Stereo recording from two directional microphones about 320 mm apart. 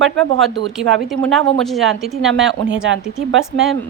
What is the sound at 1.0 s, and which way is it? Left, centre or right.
A woman's voice, centre.